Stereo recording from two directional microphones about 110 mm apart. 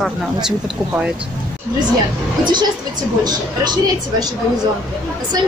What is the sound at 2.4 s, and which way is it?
Speech, 40° right (ahead or behind).